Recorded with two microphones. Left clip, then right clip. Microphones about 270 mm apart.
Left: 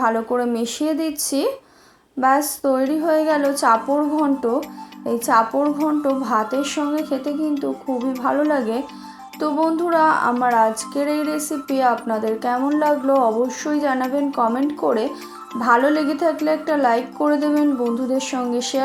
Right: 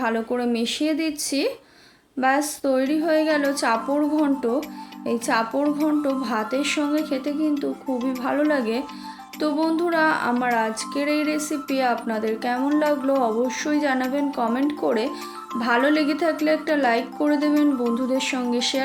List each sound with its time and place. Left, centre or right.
0.0 s speech: centre
3.1 s music: centre